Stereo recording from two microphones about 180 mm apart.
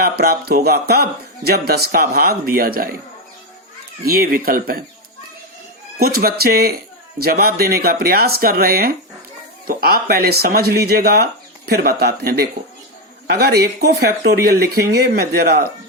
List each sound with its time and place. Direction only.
0.0 s speech: 60° right (ahead or behind)
4.0 s speech: 55° right (ahead or behind)
6.0 s speech: 55° right (ahead or behind)